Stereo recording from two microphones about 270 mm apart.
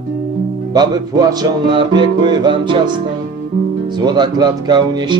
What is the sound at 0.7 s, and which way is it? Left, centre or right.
Music, centre.